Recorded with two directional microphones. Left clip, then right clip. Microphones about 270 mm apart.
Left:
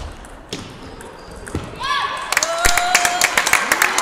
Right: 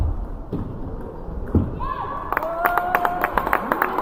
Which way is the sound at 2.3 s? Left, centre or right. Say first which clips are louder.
Left 3 dB; left.